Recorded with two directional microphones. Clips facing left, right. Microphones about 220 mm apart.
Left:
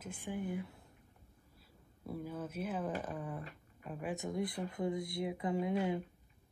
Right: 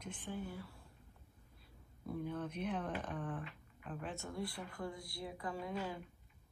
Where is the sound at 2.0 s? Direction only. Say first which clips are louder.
Even; 5° left (ahead or behind).